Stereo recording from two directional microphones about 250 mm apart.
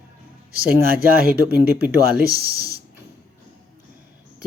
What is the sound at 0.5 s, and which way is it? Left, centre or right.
Speech, right.